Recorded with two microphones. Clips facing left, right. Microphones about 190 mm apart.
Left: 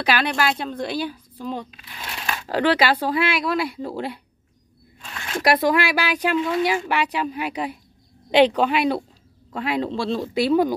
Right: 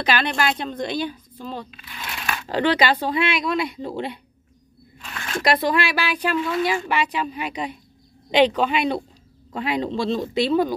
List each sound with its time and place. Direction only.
0.0 s speech: 5° left (ahead or behind)
2.1 s a sound: 25° left (ahead or behind)
2.4 s speech: 5° left (ahead or behind)